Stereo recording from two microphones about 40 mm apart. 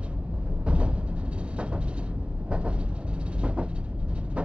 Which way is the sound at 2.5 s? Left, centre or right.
Right.